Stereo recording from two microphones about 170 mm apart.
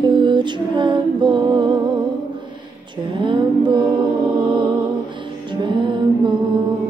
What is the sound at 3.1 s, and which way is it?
Mantra, 30° right (ahead or behind).